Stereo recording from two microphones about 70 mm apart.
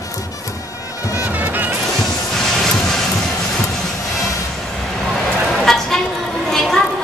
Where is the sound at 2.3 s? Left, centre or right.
Centre.